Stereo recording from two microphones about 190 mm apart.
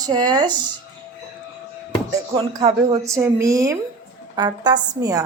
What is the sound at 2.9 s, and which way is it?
A woman's voice, 15° right (ahead or behind).